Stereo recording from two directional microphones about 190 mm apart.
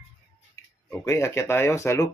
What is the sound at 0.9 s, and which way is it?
Speech, 15° left (ahead or behind).